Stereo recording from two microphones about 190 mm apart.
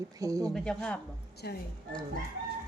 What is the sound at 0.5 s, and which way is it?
Speech, 5° left (ahead or behind).